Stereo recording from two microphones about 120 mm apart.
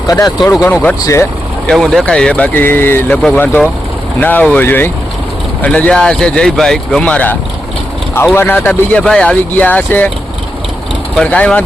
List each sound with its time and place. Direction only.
0.1 s speech: 30° left (ahead or behind)
0.6 s speech: 15° left (ahead or behind)
1.0 s speech: 25° left (ahead or behind)
1.6 s speech: centre (ahead or behind)
8.4 s speech: 15° left (ahead or behind)
11.2 s speech: 10° left (ahead or behind)